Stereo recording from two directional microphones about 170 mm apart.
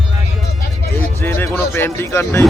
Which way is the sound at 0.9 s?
10° left (ahead or behind).